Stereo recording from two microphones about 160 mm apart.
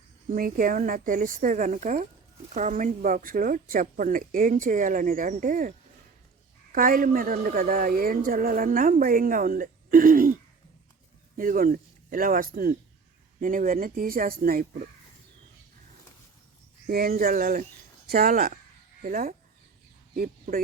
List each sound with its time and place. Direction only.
0.3 s speech: 60° right (ahead or behind)
6.7 s speech: 65° right (ahead or behind)
11.3 s speech: 60° right (ahead or behind)
16.8 s speech: 65° right (ahead or behind)